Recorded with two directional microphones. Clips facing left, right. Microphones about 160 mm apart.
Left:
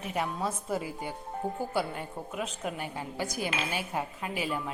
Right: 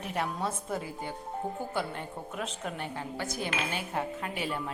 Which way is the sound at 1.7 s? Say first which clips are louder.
Left 2 dB; 10° left (ahead or behind).